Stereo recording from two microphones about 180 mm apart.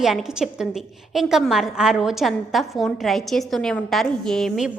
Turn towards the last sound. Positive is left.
turn(degrees=0)  # may be behind; listen again after turning